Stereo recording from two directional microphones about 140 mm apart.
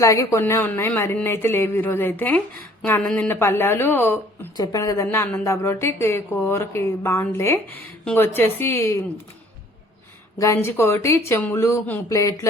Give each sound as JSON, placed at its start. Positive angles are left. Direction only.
{"t": 0.0, "sound": "speech", "side_deg": 20}
{"t": 4.5, "sound": "speech", "side_deg": 25}
{"t": 10.3, "sound": "speech", "side_deg": 25}